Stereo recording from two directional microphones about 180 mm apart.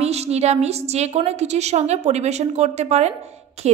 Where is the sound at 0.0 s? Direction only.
35° right (ahead or behind).